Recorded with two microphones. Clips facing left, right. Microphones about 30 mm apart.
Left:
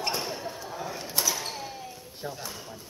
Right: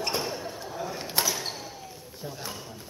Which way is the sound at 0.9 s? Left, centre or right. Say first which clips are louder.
Right 4 dB; right.